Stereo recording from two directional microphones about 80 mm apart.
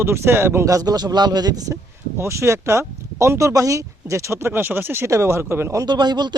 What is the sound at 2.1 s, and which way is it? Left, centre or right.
Speech, right.